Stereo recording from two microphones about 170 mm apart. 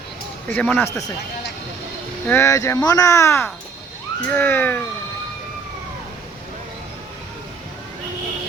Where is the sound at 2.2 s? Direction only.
15° left (ahead or behind).